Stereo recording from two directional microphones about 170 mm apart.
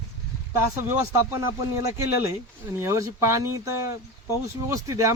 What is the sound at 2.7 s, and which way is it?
Speech, 15° right (ahead or behind).